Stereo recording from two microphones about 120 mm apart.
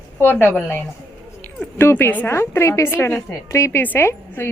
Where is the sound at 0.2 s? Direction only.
20° left (ahead or behind).